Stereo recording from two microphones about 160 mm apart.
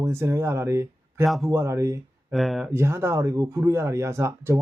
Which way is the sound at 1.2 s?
Centre (ahead or behind).